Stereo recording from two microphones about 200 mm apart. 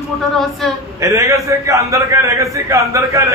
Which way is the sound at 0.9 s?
15° right (ahead or behind).